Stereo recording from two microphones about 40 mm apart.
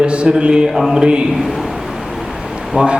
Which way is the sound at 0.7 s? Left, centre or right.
Centre.